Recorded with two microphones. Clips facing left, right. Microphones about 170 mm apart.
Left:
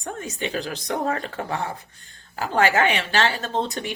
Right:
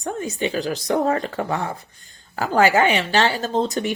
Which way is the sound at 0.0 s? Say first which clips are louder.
Right 5 dB; 40° right (ahead or behind).